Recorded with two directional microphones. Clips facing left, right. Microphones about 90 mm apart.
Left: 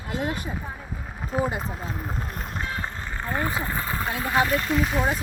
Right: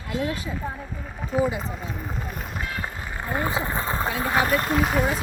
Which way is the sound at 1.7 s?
Centre (ahead or behind).